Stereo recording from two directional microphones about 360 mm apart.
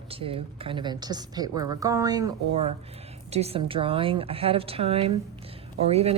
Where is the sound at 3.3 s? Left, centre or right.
Centre.